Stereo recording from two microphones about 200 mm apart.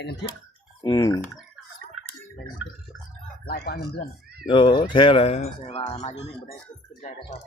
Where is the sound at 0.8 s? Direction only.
20° left (ahead or behind).